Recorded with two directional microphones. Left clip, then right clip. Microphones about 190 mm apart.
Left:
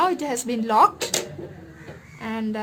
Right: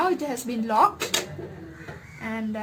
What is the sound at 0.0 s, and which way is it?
Speech, 25° left (ahead or behind).